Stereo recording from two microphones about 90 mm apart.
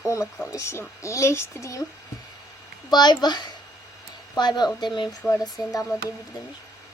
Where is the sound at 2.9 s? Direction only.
50° left (ahead or behind).